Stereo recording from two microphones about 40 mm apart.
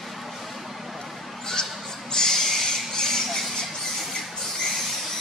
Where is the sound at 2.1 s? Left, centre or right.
Centre.